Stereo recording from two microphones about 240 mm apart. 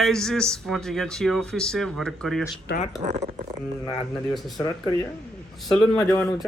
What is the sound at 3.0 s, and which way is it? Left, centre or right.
Speech, right.